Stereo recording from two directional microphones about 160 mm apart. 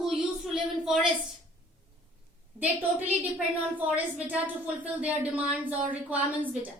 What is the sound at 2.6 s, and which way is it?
A woman's voice, 10° right (ahead or behind).